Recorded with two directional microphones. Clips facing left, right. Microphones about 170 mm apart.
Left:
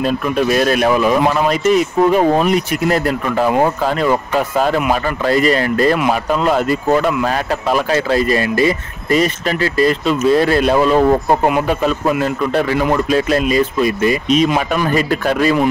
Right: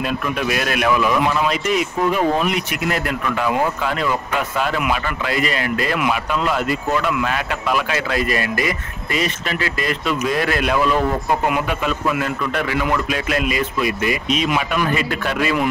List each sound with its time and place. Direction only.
0.0 s speech: 35° left (ahead or behind)
9.1 s speech: 40° left (ahead or behind)